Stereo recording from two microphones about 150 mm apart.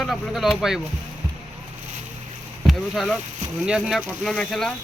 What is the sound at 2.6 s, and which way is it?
Speech, centre (ahead or behind).